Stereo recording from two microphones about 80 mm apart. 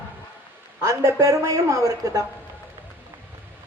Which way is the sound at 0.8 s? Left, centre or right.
Right.